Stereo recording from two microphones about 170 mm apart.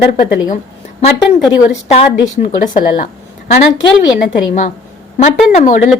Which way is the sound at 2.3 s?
45° left (ahead or behind).